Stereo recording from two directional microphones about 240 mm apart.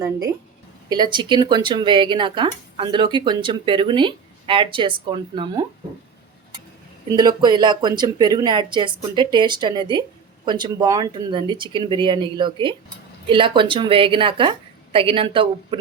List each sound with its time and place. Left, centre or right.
0.9 s speech: centre
7.1 s speech: centre